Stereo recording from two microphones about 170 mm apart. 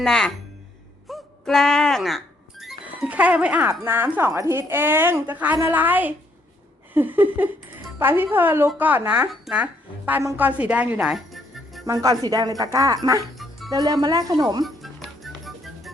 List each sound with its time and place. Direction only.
0.0 s speech: 5° left (ahead or behind)
1.0 s music: centre (ahead or behind)
2.8 s a woman's voice: 10° right (ahead or behind)
11.9 s speech: 20° right (ahead or behind)
14.6 s music: centre (ahead or behind)